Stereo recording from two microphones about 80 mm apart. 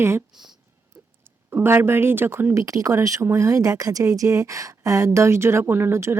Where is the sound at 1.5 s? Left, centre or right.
Right.